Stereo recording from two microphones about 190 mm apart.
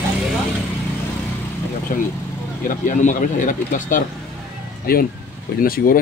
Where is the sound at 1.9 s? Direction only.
40° left (ahead or behind).